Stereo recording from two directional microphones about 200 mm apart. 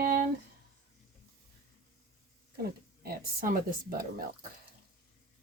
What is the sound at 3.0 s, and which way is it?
A woman's voice, 50° right (ahead or behind).